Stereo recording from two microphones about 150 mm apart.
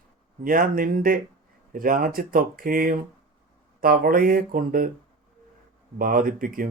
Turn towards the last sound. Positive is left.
turn(degrees=-70)  # may be behind; listen again after turning